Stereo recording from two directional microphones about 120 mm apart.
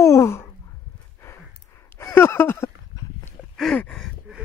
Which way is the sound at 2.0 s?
20° left (ahead or behind).